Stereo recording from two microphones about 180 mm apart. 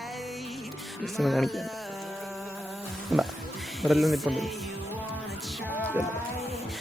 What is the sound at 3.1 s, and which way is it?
Speech, centre (ahead or behind).